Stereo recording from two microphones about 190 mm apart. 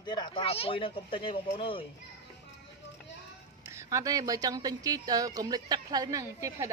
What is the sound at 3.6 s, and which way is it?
A woman's voice, 15° right (ahead or behind).